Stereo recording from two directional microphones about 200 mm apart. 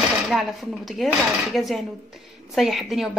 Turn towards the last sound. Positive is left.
turn(degrees=0)  # may be behind; listen again after turning